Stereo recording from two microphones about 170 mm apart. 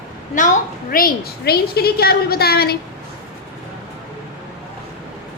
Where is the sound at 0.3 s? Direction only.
50° left (ahead or behind); by 2.7 s 65° left (ahead or behind).